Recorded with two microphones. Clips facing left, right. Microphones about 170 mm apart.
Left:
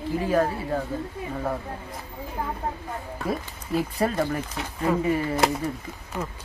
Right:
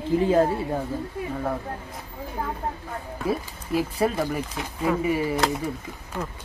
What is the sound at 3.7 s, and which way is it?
Speech, centre (ahead or behind).